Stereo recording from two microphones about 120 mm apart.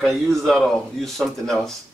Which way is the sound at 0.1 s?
Centre (ahead or behind).